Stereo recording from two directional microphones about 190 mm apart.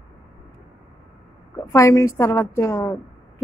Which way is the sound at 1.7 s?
15° left (ahead or behind).